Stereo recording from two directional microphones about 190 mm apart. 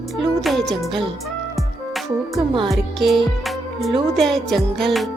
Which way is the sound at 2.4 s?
25° right (ahead or behind).